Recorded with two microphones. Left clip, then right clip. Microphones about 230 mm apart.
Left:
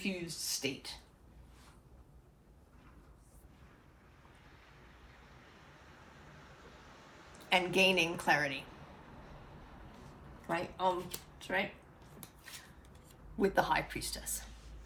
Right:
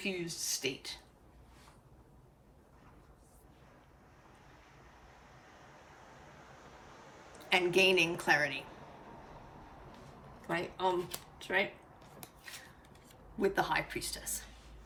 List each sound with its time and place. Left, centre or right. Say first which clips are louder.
0.0 s a woman's voice: right 2 dB; centre
7.5 s a woman's voice: right 1 dB; centre
10.5 s a woman's voice: even; centre
11.3 s a sound: right 3 dB; centre
13.4 s a woman's voice: left 1 dB; centre